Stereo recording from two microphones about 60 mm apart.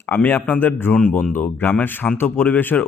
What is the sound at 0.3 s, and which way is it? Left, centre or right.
Speech, left.